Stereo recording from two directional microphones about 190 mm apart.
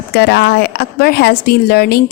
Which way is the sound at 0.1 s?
55° left (ahead or behind).